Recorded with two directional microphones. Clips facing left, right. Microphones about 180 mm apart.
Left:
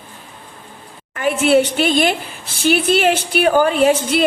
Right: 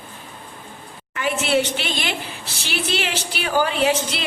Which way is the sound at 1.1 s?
50° left (ahead or behind).